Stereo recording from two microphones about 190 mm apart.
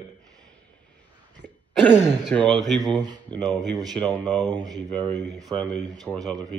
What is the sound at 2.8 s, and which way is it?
Speech, 25° right (ahead or behind).